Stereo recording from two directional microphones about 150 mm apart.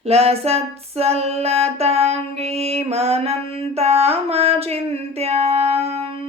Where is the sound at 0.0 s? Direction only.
45° right (ahead or behind).